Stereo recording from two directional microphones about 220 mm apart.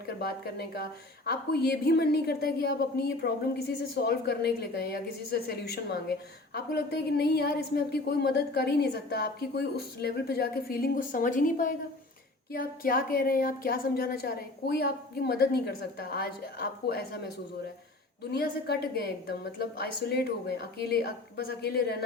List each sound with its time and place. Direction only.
0.2 s a woman's voice: 45° left (ahead or behind)
18.2 s a woman's voice: 45° left (ahead or behind)